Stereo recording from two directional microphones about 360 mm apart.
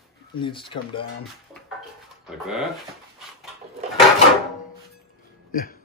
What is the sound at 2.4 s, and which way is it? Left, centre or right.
Speech, centre.